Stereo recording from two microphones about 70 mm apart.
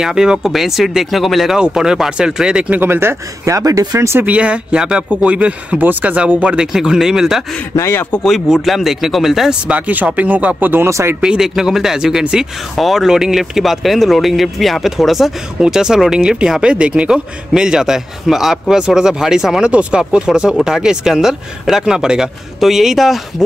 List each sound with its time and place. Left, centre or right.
0.0 s speech: centre
2.7 s speech: right
3.4 s speech: right
4.0 s speech: right
4.3 s speech: centre
8.5 s speech: centre
9.7 s speech: right
10.9 s speech: right
11.1 s speech: centre